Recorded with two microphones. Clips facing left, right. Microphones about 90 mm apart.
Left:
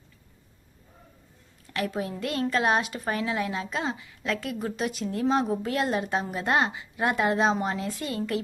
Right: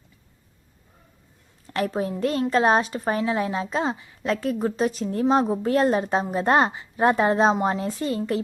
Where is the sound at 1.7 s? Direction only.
35° right (ahead or behind).